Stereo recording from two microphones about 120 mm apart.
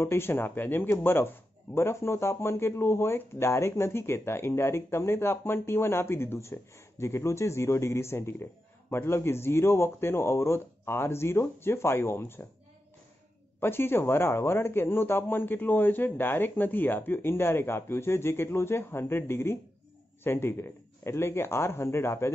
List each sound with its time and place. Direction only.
0.0 s speech: 20° left (ahead or behind)
13.6 s speech: 20° left (ahead or behind)